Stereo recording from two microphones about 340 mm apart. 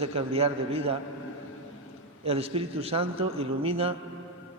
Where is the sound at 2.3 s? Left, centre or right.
Centre.